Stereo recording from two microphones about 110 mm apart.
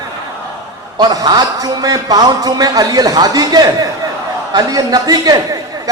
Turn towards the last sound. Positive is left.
turn(degrees=-35)  # may be behind; listen again after turning